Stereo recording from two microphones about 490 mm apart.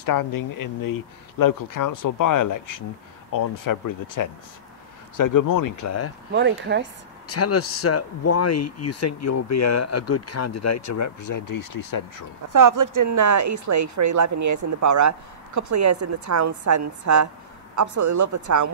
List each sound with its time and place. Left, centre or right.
0.0 s speech: left
6.3 s speech: right
7.2 s speech: left
12.5 s speech: right